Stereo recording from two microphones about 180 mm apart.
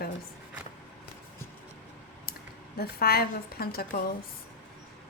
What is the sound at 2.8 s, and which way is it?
Speech, 60° left (ahead or behind).